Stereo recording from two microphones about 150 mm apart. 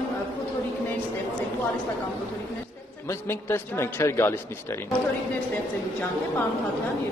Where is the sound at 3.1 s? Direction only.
15° left (ahead or behind).